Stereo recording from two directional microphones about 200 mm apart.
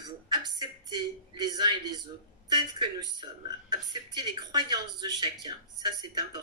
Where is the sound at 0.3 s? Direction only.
20° right (ahead or behind).